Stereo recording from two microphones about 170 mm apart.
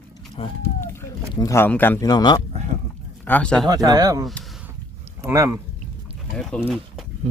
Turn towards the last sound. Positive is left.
turn(degrees=-40)  # may be behind; listen again after turning